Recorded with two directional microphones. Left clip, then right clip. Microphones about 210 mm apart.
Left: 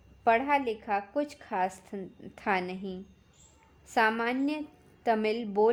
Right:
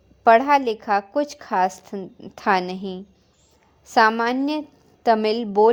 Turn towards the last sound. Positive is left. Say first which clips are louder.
# right 9 dB
turn(degrees=-20)  # may be behind; listen again after turning